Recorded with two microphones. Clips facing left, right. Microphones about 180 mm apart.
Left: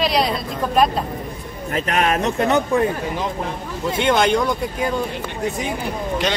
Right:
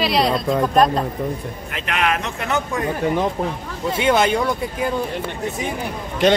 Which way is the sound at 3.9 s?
5° right (ahead or behind).